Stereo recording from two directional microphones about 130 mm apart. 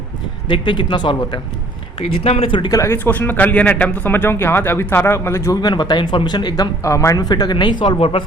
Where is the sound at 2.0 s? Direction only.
50° left (ahead or behind).